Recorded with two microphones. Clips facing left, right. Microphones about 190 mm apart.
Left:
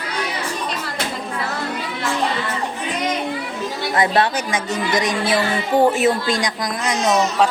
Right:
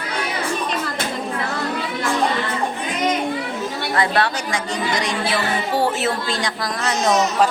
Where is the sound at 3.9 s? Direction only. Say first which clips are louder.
Left 2 dB; 20° left (ahead or behind).